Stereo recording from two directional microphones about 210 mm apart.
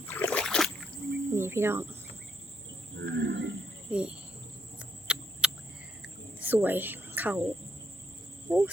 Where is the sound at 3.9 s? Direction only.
5° right (ahead or behind).